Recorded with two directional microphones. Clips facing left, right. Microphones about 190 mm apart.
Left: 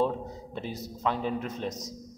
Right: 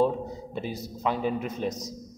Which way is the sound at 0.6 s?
5° right (ahead or behind).